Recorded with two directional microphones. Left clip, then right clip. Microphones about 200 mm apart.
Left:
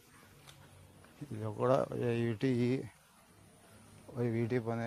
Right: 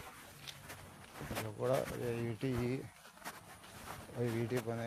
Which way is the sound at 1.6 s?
60° left (ahead or behind).